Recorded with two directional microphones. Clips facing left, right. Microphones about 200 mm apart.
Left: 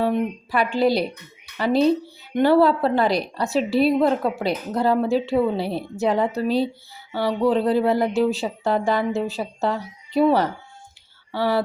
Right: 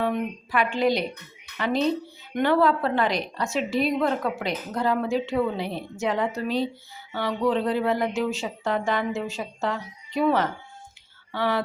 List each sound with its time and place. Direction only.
0.0 s a woman's voice: 35° left (ahead or behind)